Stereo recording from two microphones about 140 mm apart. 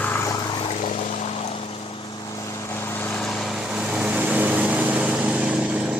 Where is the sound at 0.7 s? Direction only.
50° left (ahead or behind).